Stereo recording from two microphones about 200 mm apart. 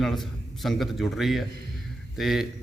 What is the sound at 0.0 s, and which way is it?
A man's voice, centre (ahead or behind).